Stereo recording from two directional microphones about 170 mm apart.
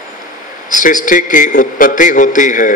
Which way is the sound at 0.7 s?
50° left (ahead or behind).